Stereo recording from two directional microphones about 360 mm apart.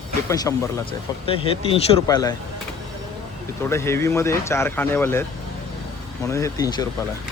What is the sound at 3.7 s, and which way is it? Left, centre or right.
Speech, centre.